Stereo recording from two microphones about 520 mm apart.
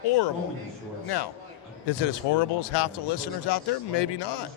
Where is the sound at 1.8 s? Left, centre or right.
Left.